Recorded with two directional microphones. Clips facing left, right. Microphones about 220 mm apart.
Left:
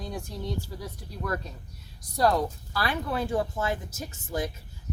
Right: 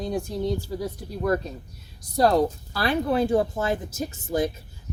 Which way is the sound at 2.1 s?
25° right (ahead or behind).